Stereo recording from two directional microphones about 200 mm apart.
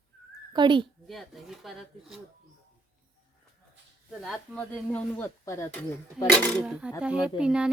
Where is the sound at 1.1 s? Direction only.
Centre (ahead or behind).